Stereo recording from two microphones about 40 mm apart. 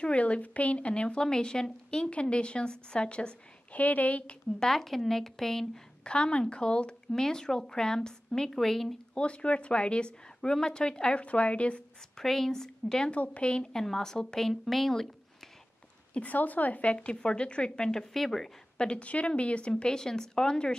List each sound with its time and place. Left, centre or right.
0.0 s speech: left
3.7 s a woman's voice: left
4.6 s a woman's voice: centre
6.0 s speech: left
7.1 s a woman's voice: centre
9.1 s speech: left
11.1 s a woman's voice: left
12.2 s a woman's voice: centre
13.1 s speech: left
13.7 s a woman's voice: centre
16.1 s speech: left
18.1 s a woman's voice: centre
18.8 s speech: left
19.7 s a woman's voice: centre